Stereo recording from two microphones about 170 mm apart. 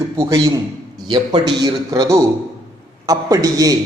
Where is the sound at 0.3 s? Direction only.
20° right (ahead or behind).